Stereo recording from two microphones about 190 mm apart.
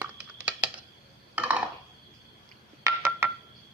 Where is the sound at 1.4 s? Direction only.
5° right (ahead or behind).